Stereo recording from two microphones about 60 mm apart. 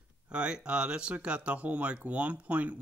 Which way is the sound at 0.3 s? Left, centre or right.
Centre.